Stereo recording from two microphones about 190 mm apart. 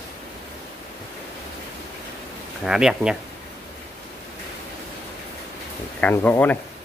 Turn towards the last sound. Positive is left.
turn(degrees=10)  # may be behind; listen again after turning